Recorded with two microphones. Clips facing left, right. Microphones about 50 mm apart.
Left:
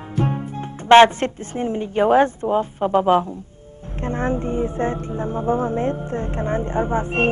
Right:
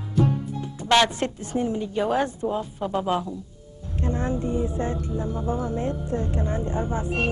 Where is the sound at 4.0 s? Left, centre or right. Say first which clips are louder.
Left 4 dB; left.